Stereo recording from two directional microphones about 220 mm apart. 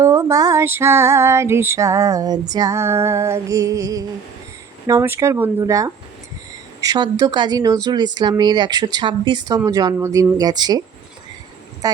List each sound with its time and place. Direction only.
0.0 s female singing: 15° right (ahead or behind)
7.9 s speech: 20° right (ahead or behind)
9.6 s female singing: 15° right (ahead or behind)